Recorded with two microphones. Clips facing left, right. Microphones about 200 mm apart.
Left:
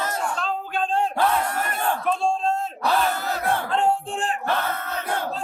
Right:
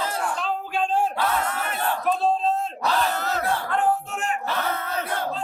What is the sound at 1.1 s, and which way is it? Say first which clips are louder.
Battle cry: left 3 dB; 50° left (ahead or behind).